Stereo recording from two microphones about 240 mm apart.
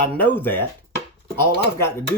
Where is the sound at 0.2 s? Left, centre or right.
Centre.